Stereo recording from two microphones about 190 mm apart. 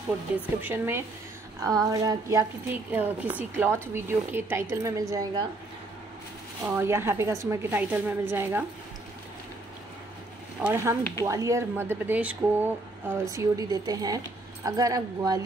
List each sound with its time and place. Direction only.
0.6 s a woman's voice: 10° right (ahead or behind)
6.6 s speech: 10° right (ahead or behind)
10.6 s speech: 15° right (ahead or behind)